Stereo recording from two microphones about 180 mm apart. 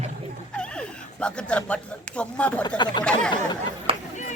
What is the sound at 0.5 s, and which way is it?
Speech, 5° left (ahead or behind).